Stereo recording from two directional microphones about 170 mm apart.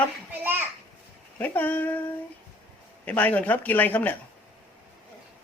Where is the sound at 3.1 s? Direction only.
10° left (ahead or behind).